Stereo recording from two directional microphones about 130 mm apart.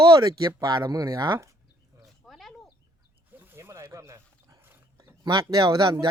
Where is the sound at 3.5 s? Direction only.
20° right (ahead or behind).